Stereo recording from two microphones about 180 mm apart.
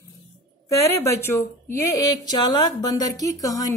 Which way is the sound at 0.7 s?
20° left (ahead or behind).